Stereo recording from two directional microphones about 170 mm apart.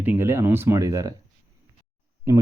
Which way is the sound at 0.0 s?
10° right (ahead or behind).